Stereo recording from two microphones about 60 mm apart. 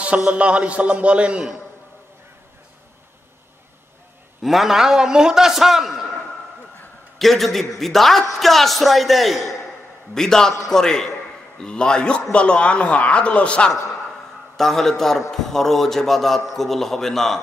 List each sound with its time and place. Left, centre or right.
0.0 s a man's voice: right
4.4 s a man's voice: centre
7.2 s a man's voice: centre
14.6 s a man's voice: centre